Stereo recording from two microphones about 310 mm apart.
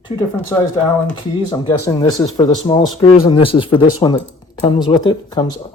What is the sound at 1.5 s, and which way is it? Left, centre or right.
Speech, centre.